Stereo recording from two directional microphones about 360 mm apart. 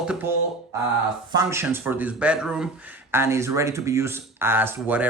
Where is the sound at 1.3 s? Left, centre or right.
Centre.